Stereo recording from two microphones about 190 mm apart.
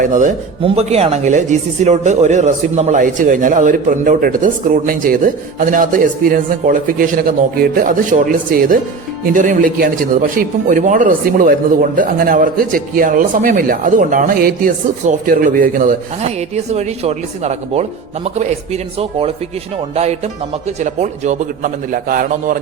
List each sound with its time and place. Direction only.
0.0 s speech: 40° right (ahead or behind)
16.7 s speech: 35° right (ahead or behind)